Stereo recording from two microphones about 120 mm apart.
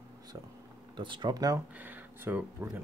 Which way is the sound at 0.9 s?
40° right (ahead or behind).